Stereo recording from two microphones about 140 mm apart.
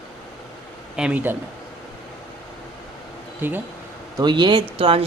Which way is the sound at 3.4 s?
15° right (ahead or behind).